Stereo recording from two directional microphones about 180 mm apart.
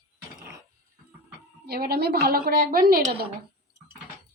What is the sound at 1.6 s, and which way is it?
A woman's voice, 60° right (ahead or behind).